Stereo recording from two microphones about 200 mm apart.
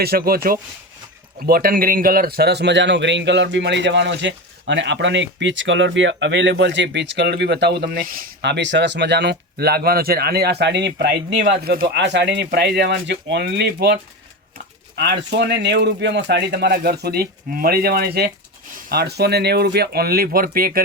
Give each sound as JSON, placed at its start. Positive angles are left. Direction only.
{"t": 0.0, "sound": "a man's voice", "side_deg": -50}
{"t": 7.8, "sound": "a man's voice", "side_deg": -45}